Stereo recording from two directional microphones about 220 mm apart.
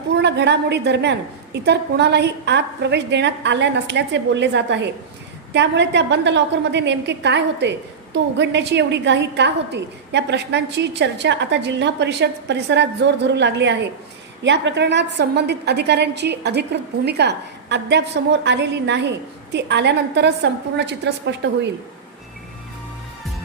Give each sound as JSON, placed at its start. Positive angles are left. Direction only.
{"t": 0.1, "sound": "a woman's voice", "side_deg": -50}